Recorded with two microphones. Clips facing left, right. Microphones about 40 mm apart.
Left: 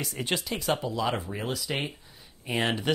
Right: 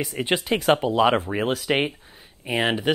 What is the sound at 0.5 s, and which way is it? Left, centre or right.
Speech, right.